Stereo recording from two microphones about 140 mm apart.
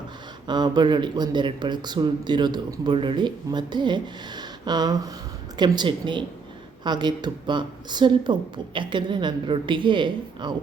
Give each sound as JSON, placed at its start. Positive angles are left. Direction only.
{"t": 0.4, "sound": "speech", "side_deg": -30}